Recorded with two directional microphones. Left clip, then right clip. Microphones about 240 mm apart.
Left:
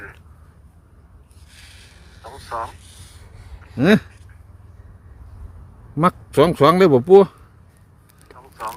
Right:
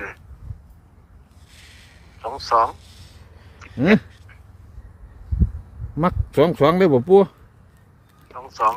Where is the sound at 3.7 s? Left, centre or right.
Centre.